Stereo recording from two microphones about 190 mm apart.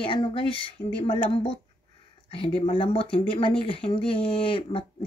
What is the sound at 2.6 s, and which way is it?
Speech, 25° left (ahead or behind).